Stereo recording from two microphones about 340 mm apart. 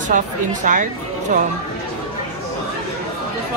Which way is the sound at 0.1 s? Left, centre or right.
Right.